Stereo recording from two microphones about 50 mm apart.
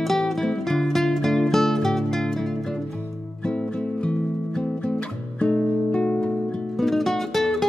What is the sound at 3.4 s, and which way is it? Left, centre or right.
Music, centre.